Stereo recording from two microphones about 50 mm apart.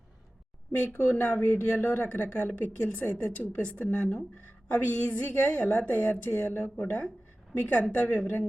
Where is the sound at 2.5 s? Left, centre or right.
Left.